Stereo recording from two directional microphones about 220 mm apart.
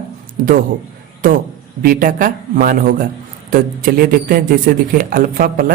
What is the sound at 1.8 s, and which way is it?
A man's voice, 40° right (ahead or behind).